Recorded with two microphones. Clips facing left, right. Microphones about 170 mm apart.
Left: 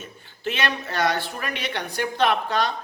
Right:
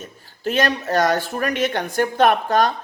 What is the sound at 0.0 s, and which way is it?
A man's voice, 40° right (ahead or behind).